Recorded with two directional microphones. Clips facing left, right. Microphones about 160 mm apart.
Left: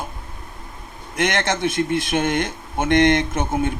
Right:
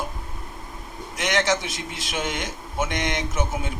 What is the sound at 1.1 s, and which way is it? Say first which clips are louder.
Speech: left 2 dB; 55° left (ahead or behind).